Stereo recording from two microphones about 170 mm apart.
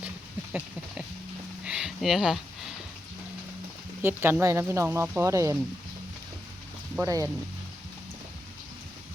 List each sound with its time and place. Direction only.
1.6 s a sound: 5° right (ahead or behind)
4.0 s speech: 15° right (ahead or behind)
7.0 s speech: 20° right (ahead or behind)